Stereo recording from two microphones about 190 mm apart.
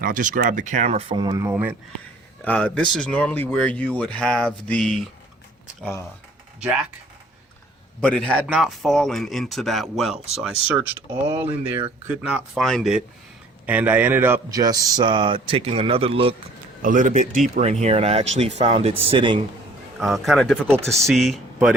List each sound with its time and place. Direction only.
0.0 s speech: 45° right (ahead or behind); by 1.7 s 15° right (ahead or behind)
2.4 s speech: 10° left (ahead or behind)
5.8 s speech: 15° left (ahead or behind)
8.0 s speech: 5° left (ahead or behind)
8.4 s speech: 5° right (ahead or behind)
11.1 s speech: 25° right (ahead or behind)
12.0 s speech: 5° right (ahead or behind); by 16.3 s 30° right (ahead or behind)
16.8 s speech: 40° right (ahead or behind)
20.0 s speech: centre (ahead or behind)